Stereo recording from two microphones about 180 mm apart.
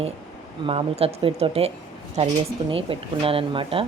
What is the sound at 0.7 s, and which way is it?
Speech, 30° right (ahead or behind).